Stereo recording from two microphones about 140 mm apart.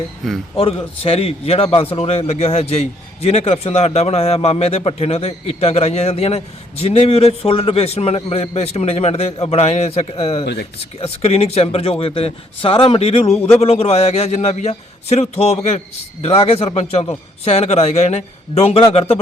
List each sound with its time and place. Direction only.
0.5 s a man's voice: 40° left (ahead or behind)